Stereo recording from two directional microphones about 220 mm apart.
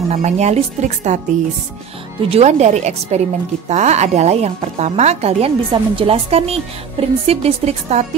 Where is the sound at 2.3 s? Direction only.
30° right (ahead or behind).